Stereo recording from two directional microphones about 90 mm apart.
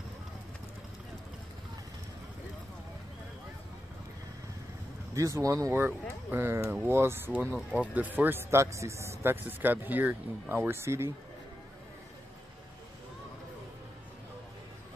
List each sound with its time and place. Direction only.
5.1 s speech: 35° right (ahead or behind)
5.7 s speech: 25° right (ahead or behind)
7.5 s speech: 10° right (ahead or behind)
7.9 s speech: 20° right (ahead or behind)